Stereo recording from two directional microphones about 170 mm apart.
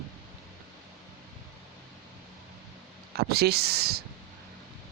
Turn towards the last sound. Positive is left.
turn(degrees=-70)  # may be behind; listen again after turning